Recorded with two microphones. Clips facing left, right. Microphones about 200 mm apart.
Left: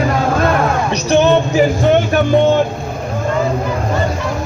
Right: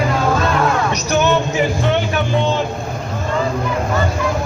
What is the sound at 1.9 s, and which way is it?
Speech, 50° left (ahead or behind).